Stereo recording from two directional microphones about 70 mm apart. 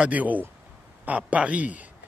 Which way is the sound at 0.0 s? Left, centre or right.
Right.